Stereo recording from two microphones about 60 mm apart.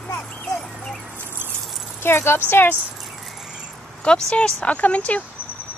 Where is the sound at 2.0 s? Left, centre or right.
Left.